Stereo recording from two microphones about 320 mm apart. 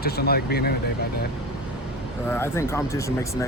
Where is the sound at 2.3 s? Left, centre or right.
Centre.